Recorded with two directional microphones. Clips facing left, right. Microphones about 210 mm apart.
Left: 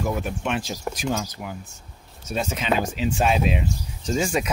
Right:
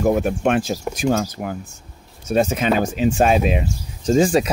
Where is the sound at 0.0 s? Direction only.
50° right (ahead or behind).